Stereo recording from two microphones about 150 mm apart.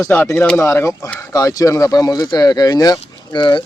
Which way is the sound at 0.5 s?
20° left (ahead or behind).